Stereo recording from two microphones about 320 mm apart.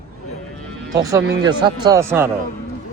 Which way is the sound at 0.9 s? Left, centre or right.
Centre.